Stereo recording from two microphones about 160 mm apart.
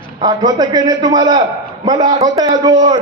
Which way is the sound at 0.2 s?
25° right (ahead or behind).